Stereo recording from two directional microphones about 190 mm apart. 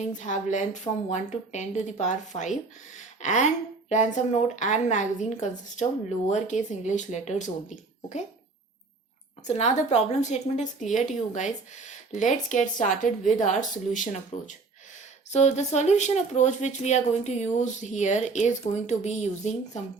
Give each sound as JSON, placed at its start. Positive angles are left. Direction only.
{"t": 0.1, "sound": "a woman's voice", "side_deg": 40}
{"t": 9.5, "sound": "a woman's voice", "side_deg": 35}